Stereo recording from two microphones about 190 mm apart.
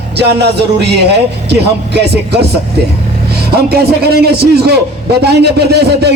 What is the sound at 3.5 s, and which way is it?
Speech, 55° right (ahead or behind).